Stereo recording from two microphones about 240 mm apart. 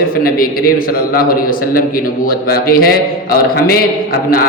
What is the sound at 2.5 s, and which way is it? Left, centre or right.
A man's voice, left.